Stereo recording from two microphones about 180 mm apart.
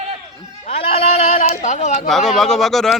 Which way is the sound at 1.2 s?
50° left (ahead or behind).